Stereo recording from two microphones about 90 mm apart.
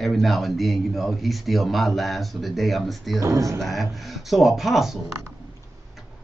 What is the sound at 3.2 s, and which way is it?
Speech, 40° right (ahead or behind).